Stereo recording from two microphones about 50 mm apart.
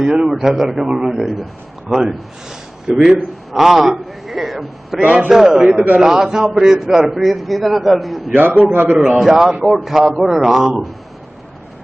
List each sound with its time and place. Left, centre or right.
0.0 s a man's voice: centre
4.9 s a man's voice: right
5.3 s a man's voice: centre
5.7 s a man's voice: right
6.0 s a man's voice: centre
8.4 s a man's voice: right
9.2 s a man's voice: centre